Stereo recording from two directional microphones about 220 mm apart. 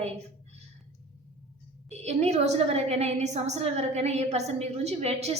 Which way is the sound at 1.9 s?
30° right (ahead or behind).